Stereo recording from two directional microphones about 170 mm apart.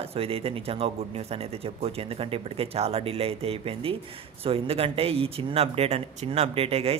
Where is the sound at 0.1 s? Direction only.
35° right (ahead or behind).